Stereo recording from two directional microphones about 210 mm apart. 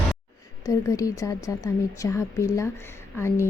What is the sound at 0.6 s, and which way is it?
A woman's voice, 15° left (ahead or behind).